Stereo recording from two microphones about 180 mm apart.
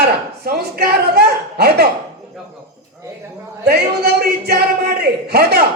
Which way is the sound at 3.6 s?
60° right (ahead or behind).